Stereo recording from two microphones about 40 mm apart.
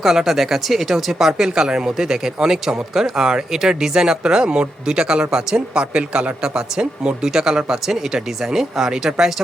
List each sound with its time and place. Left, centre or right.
0.2 s speech: centre; by 7.3 s right
7.3 s speech: centre